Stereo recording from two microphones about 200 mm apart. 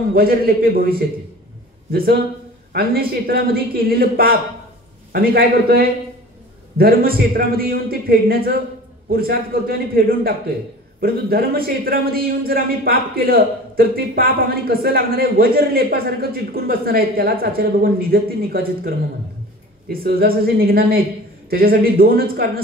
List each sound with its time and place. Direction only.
0.1 s a man's voice: 50° right (ahead or behind)